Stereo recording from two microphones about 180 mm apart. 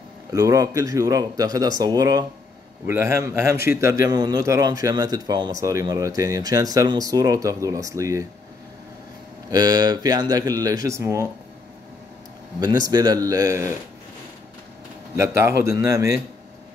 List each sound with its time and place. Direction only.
0.3 s speech: 20° right (ahead or behind)
9.5 s speech: 20° right (ahead or behind)
12.5 s speech: 20° right (ahead or behind)
15.1 s a man's voice: 15° right (ahead or behind)